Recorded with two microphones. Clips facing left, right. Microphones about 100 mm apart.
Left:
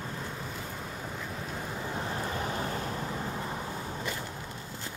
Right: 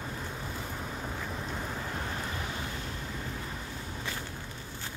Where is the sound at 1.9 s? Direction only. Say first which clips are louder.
Left 3 dB; 25° left (ahead or behind); by 2.9 s 40° left (ahead or behind).